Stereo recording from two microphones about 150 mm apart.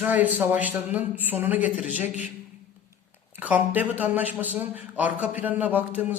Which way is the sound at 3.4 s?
10° right (ahead or behind).